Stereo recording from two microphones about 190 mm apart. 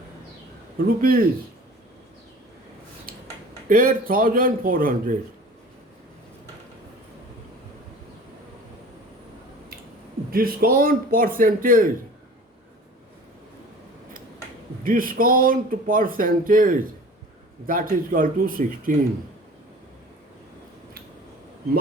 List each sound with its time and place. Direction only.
0.9 s speech: 50° right (ahead or behind)
3.7 s speech: 45° right (ahead or behind)
10.3 s speech: 50° right (ahead or behind)
14.8 s speech: 45° right (ahead or behind)